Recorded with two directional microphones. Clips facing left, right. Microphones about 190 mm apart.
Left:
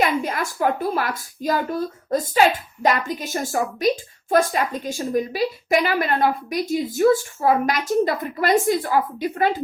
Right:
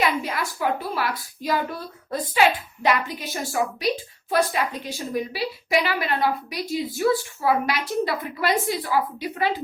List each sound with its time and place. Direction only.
0.0 s a woman's voice: 50° left (ahead or behind)